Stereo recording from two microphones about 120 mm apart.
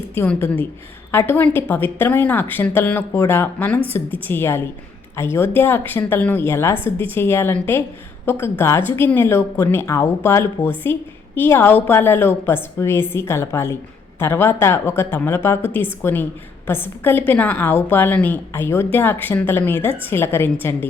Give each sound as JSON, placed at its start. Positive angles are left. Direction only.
{"t": 0.3, "sound": "a woman's voice", "side_deg": 20}